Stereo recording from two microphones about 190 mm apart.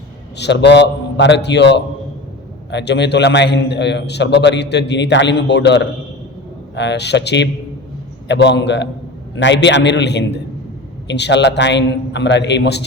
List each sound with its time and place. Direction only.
0.3 s a man's voice: 65° left (ahead or behind)